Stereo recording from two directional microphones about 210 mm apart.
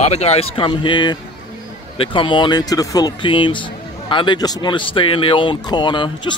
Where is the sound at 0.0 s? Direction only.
30° left (ahead or behind).